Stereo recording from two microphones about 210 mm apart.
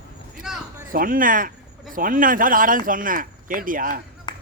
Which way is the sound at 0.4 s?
Centre (ahead or behind).